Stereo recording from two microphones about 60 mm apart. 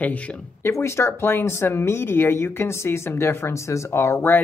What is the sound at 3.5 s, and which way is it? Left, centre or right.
Speech, left.